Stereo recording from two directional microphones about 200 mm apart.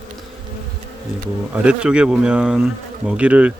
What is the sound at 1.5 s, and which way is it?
Speech, 5° right (ahead or behind).